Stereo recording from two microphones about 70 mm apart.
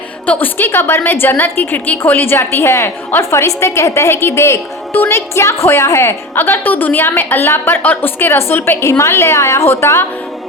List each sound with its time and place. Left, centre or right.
0.3 s a woman's voice: left